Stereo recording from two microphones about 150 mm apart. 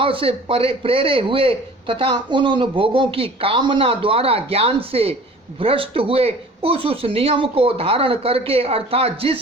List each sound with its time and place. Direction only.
0.0 s a man's voice: 35° right (ahead or behind)